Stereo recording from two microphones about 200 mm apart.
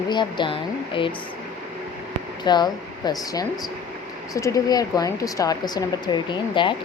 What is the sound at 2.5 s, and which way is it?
Speech, 20° left (ahead or behind).